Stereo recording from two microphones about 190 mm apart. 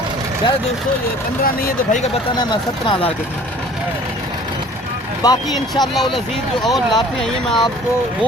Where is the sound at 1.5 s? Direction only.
50° left (ahead or behind).